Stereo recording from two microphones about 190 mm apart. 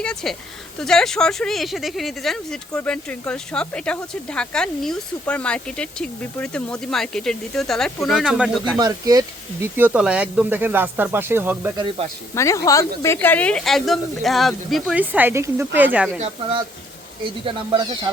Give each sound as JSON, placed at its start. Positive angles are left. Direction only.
{"t": 0.0, "sound": "speech", "side_deg": 5}
{"t": 8.8, "sound": "speech", "side_deg": -20}
{"t": 11.8, "sound": "speech", "side_deg": -25}
{"t": 12.3, "sound": "speech", "side_deg": 15}
{"t": 16.2, "sound": "speech", "side_deg": -30}